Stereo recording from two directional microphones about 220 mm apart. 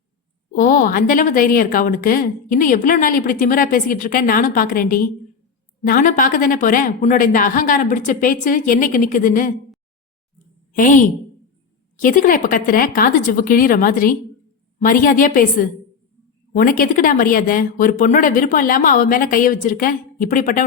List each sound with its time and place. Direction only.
0.5 s a woman's voice: 40° left (ahead or behind)
10.8 s a woman's voice: 35° left (ahead or behind)
12.0 s a woman's voice: 40° left (ahead or behind)